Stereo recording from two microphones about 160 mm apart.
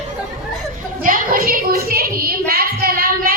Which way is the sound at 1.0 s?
60° right (ahead or behind).